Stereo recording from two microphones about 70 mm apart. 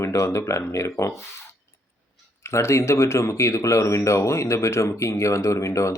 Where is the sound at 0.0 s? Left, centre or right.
Left.